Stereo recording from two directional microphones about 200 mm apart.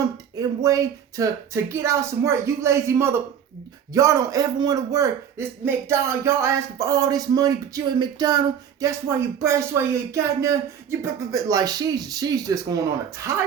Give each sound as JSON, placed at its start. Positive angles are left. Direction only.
{"t": 0.3, "sound": "a man's voice", "side_deg": -15}